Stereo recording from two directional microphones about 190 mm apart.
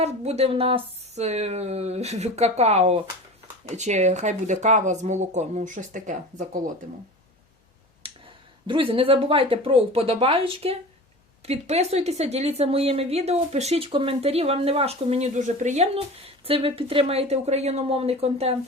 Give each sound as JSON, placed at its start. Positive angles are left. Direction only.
{"t": 0.0, "sound": "a woman's voice", "side_deg": -35}
{"t": 8.0, "sound": "finger snapping", "side_deg": -30}
{"t": 8.6, "sound": "a woman's voice", "side_deg": -25}